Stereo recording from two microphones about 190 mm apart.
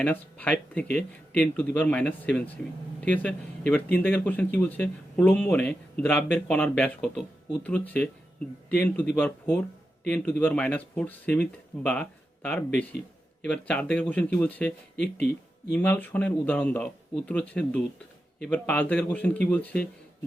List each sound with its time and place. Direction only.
0.0 s a man's voice: 10° left (ahead or behind)
14.9 s speech: 60° left (ahead or behind)
15.7 s speech: 10° left (ahead or behind)